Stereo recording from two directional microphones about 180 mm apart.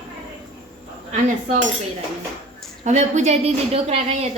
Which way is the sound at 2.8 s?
40° right (ahead or behind).